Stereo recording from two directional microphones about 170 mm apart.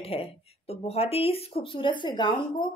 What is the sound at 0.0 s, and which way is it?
A woman's voice, 35° left (ahead or behind).